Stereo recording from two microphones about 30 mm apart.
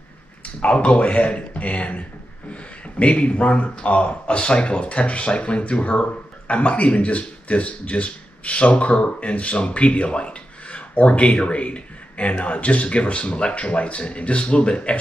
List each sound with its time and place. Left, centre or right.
0.6 s speech: left